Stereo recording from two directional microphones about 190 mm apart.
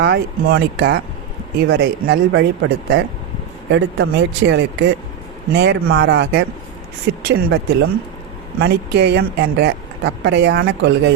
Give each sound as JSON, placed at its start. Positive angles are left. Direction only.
{"t": 0.0, "sound": "speech", "side_deg": -60}